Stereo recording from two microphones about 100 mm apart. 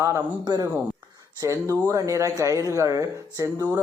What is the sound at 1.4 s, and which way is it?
A man's voice, 30° right (ahead or behind).